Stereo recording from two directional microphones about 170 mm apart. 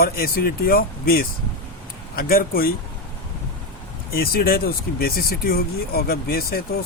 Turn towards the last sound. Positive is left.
turn(degrees=60)  # may be behind; listen again after turning